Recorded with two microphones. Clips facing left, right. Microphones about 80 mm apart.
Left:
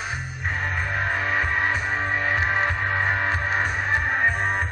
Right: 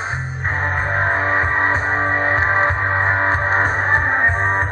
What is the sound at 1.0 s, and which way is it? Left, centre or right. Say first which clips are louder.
Music: right 6 dB; right.